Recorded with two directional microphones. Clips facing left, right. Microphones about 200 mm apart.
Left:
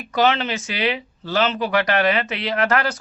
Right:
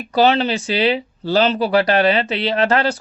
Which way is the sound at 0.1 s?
35° right (ahead or behind).